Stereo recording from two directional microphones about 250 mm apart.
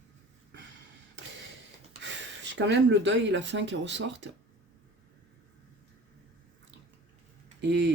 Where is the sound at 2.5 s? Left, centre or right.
Right.